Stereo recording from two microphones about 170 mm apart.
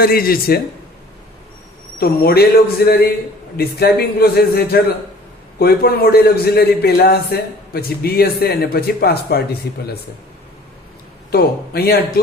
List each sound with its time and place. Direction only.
0.0 s a man's voice: 60° left (ahead or behind)
2.0 s a man's voice: 65° left (ahead or behind)
11.3 s a man's voice: 65° left (ahead or behind)